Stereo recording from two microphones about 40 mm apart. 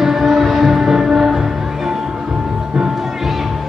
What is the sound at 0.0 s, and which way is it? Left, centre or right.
Music, centre.